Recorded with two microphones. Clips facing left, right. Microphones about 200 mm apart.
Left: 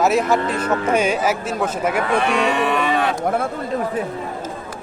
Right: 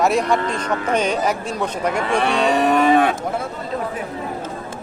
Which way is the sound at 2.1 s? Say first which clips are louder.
Right 3 dB; 35° right (ahead or behind).